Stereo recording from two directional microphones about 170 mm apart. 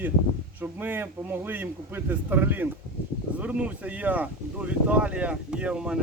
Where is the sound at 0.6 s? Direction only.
10° right (ahead or behind).